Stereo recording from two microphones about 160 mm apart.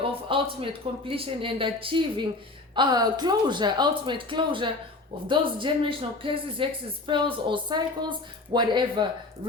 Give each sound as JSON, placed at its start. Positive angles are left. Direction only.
{"t": 0.0, "sound": "speech", "side_deg": -35}